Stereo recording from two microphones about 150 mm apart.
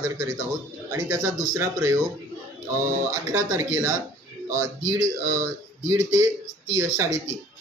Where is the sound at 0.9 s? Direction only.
25° right (ahead or behind).